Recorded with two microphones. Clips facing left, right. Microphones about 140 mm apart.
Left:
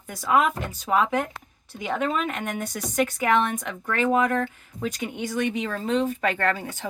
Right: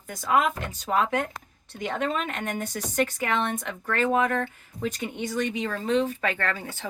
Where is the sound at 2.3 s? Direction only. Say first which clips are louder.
Left 1 dB; 35° right (ahead or behind).